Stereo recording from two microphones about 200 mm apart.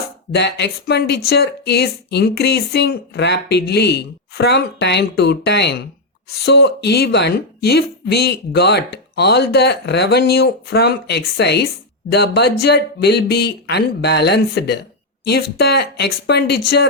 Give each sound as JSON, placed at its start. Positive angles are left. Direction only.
{"t": 0.3, "sound": "speech", "side_deg": 55}